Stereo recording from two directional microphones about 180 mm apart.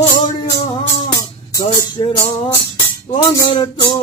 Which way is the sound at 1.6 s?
25° left (ahead or behind).